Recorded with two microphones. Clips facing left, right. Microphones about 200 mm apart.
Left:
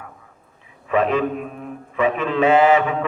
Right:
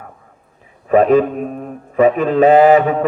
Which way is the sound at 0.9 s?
40° right (ahead or behind).